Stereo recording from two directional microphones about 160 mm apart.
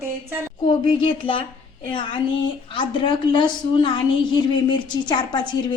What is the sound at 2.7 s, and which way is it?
A woman's voice, 30° left (ahead or behind).